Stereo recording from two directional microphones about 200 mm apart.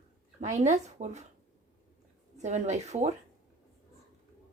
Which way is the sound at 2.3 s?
35° right (ahead or behind).